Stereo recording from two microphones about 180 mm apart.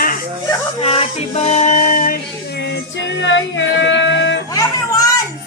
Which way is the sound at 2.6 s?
75° left (ahead or behind).